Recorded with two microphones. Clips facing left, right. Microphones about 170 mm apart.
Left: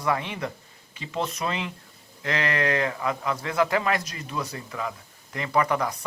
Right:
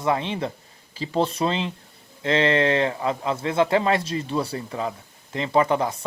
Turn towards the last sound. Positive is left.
turn(degrees=-25)  # may be behind; listen again after turning